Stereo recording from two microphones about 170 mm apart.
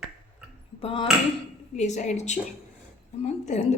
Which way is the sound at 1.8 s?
45° left (ahead or behind).